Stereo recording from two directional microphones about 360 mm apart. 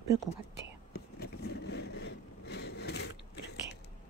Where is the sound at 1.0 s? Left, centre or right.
Left.